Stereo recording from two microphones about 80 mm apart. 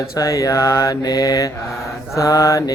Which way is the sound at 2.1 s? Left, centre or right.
Left.